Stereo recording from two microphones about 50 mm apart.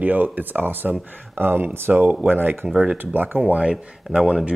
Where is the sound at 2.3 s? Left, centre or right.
Right.